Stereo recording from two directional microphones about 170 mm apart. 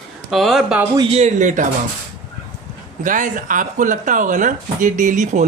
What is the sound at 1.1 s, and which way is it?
Speech, 40° right (ahead or behind).